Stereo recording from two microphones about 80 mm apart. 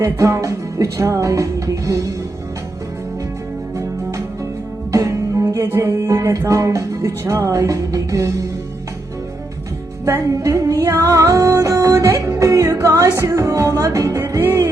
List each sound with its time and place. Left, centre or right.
0.0 s speech: right
4.9 s music: right
6.4 s speech: right
7.6 s music: right
10.1 s speech: right
11.0 s music: right
13.8 s speech: right